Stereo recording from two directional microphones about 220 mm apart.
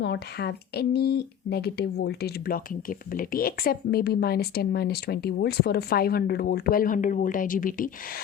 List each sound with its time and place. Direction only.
0.0 s speech: 50° left (ahead or behind)